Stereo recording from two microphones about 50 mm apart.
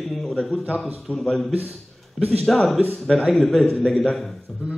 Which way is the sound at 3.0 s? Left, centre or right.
Centre.